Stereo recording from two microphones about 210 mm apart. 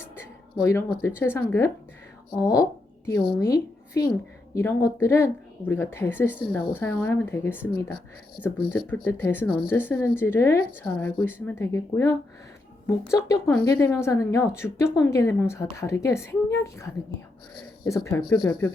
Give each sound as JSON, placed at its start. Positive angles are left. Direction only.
{"t": 0.2, "sound": "a woman's voice", "side_deg": 10}